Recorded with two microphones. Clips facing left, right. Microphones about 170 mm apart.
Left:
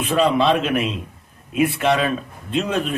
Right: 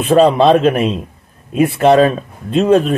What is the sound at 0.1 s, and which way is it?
Speech, 40° right (ahead or behind).